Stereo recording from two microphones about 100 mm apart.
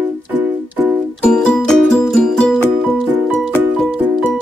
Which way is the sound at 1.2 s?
10° left (ahead or behind).